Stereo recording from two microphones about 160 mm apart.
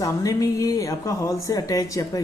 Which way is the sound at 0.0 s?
20° left (ahead or behind).